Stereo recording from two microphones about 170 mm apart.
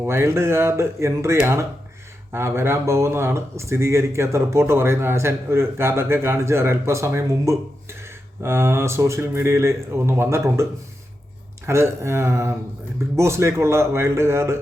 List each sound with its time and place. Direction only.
0.0 s speech: 15° right (ahead or behind)